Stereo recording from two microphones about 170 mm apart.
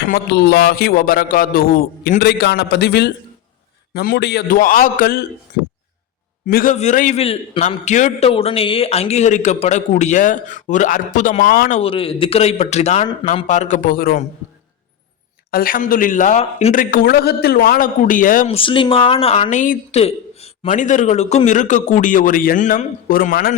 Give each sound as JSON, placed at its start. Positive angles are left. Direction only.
{"t": 0.1, "sound": "a man's voice", "side_deg": 75}
{"t": 6.5, "sound": "a man's voice", "side_deg": 55}
{"t": 11.8, "sound": "a man's voice", "side_deg": 35}
{"t": 15.5, "sound": "a man's voice", "side_deg": 55}
{"t": 16.7, "sound": "a man's voice", "side_deg": 55}
{"t": 18.4, "sound": "speech", "side_deg": 30}
{"t": 20.0, "sound": "a man's voice", "side_deg": 40}